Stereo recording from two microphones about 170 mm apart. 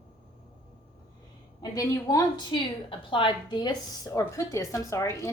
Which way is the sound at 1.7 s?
20° left (ahead or behind).